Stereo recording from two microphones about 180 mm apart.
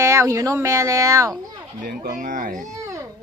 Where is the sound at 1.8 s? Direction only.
45° right (ahead or behind).